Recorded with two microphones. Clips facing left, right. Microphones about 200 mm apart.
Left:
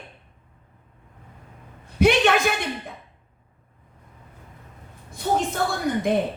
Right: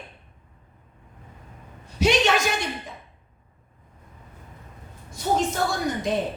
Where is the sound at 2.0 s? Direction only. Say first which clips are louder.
Left 3 dB; 55° left (ahead or behind).